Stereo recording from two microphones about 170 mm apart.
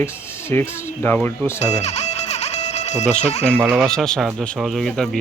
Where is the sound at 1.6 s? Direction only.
40° left (ahead or behind).